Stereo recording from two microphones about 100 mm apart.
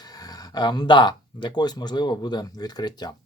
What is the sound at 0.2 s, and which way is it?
Speech, 40° left (ahead or behind).